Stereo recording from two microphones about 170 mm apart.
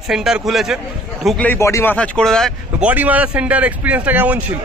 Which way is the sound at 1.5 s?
15° left (ahead or behind).